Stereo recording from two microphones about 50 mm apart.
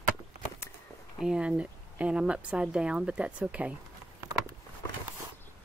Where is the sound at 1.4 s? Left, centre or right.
Right.